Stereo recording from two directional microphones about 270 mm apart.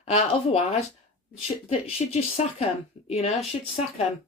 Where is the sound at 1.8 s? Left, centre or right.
Left.